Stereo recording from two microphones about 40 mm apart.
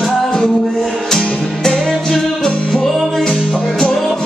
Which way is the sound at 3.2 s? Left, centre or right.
Centre.